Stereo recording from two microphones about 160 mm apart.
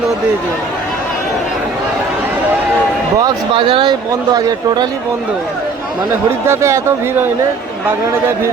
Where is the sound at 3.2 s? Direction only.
30° right (ahead or behind).